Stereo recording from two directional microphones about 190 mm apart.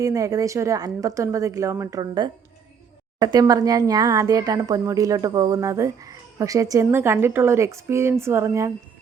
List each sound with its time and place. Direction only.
0.0 s speech: 15° right (ahead or behind)